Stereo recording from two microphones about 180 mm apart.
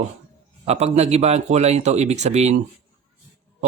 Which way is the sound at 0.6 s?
35° right (ahead or behind).